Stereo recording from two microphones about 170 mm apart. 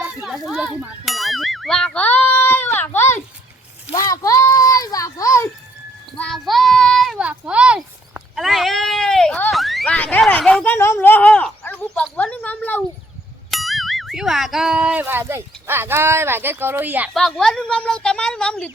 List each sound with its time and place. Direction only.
0.0 s speech: centre (ahead or behind); by 3.2 s 15° left (ahead or behind)
3.9 s a sound: 20° left (ahead or behind)
6.1 s speech: 5° left (ahead or behind)
17.2 s a woman's voice: centre (ahead or behind)